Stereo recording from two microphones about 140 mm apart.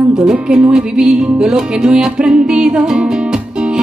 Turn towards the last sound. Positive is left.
turn(degrees=-5)  # may be behind; listen again after turning